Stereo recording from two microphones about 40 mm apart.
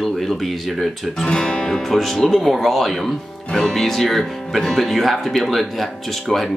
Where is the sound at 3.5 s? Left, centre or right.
Centre.